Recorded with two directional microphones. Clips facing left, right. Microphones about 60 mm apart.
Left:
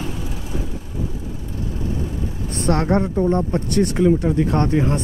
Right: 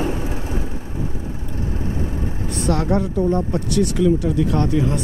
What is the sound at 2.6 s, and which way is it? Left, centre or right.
Speech, left.